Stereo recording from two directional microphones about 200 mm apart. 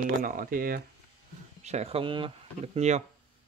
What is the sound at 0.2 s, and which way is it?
Speech, 45° right (ahead or behind).